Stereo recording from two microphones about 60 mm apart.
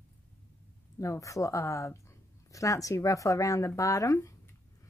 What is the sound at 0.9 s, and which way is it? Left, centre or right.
Speech, left.